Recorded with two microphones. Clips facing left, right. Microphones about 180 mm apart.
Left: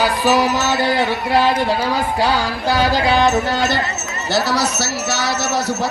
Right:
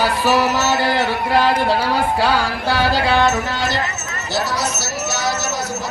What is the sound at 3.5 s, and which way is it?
Speech, 50° left (ahead or behind).